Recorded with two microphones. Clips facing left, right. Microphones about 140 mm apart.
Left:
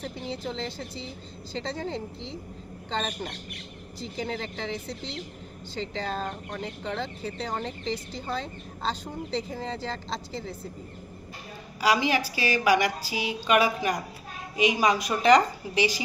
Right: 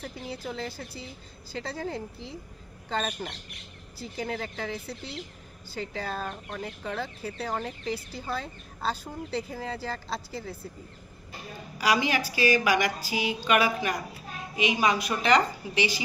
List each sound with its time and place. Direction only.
0.6 s speech: 5° right (ahead or behind)
6.1 s speech: 15° left (ahead or behind)
6.6 s speech: 5° right (ahead or behind)
11.8 s a woman's voice: 30° left (ahead or behind)